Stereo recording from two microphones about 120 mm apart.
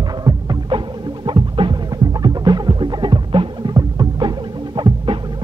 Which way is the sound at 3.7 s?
30° right (ahead or behind).